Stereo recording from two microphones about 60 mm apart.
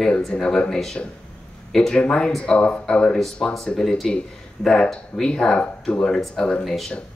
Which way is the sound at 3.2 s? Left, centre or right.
Centre.